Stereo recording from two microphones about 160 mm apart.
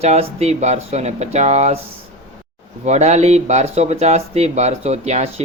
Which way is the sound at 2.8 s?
45° right (ahead or behind).